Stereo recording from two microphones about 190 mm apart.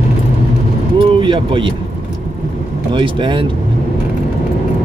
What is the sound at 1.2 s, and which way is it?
Speech, 25° right (ahead or behind).